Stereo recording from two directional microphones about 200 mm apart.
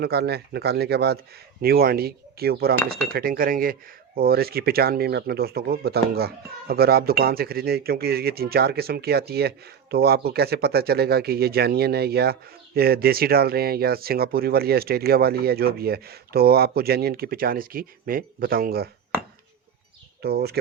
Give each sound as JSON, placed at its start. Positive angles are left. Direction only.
{"t": 0.0, "sound": "speech", "side_deg": -55}
{"t": 20.2, "sound": "speech", "side_deg": -50}